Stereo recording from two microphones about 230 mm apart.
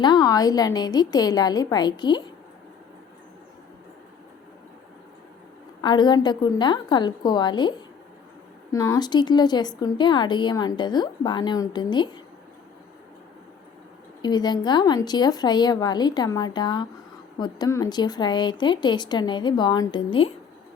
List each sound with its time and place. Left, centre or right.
0.0 s a woman's voice: centre
5.8 s speech: centre
8.7 s speech: centre
14.2 s a woman's voice: centre